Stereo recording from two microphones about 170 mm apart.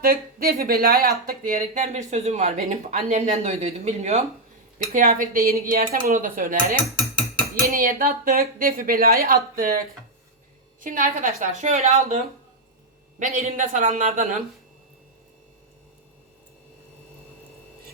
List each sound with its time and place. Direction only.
0.0 s a woman's voice: 60° right (ahead or behind)
1.6 s speech: 45° right (ahead or behind)
4.9 s a woman's voice: 55° right (ahead or behind)